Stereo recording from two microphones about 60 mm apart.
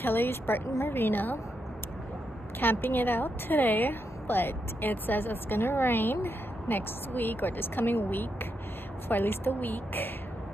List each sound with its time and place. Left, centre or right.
0.0 s a woman's voice: left
2.6 s a woman's voice: left